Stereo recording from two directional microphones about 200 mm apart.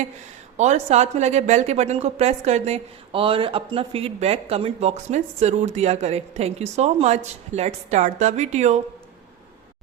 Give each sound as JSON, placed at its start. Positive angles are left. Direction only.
{"t": 0.5, "sound": "a woman's voice", "side_deg": -35}